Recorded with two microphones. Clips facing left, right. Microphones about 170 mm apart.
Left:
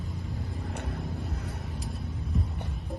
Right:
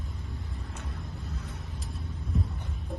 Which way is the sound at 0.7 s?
60° left (ahead or behind).